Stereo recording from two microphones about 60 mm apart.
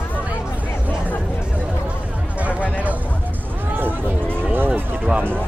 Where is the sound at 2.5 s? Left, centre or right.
Left.